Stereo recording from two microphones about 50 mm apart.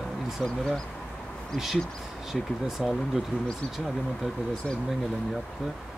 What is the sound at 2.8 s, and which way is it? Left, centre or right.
Speech, centre.